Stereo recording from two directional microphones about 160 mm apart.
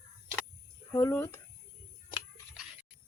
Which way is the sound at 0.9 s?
15° left (ahead or behind).